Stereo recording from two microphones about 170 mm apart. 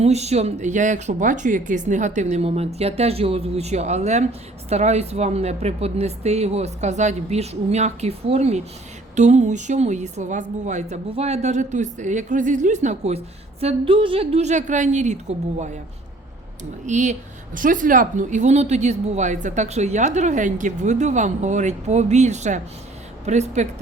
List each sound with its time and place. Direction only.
0.0 s a woman's voice: 40° right (ahead or behind)
16.8 s a woman's voice: 45° right (ahead or behind)